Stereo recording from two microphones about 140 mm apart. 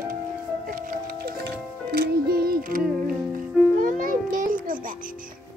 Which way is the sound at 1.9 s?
90° right.